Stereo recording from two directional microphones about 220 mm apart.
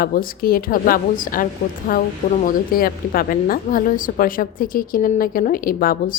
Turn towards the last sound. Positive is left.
turn(degrees=40)  # may be behind; listen again after turning